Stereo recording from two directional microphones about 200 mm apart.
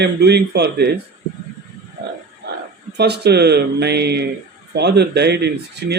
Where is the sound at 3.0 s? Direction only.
55° right (ahead or behind).